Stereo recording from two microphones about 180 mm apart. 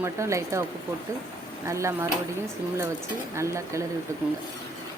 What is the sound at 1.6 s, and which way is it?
Speech, 15° right (ahead or behind).